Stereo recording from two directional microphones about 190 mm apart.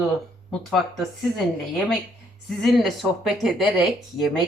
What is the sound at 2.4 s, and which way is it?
A woman's voice, centre (ahead or behind).